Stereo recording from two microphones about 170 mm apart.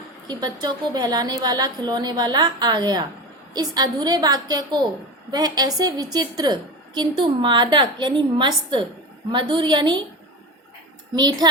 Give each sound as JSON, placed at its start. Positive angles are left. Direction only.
{"t": 0.3, "sound": "a woman's voice", "side_deg": -25}
{"t": 11.1, "sound": "a woman's voice", "side_deg": -25}